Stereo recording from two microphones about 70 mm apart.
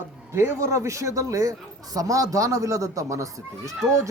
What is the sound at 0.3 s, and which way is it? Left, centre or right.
A man's voice, right.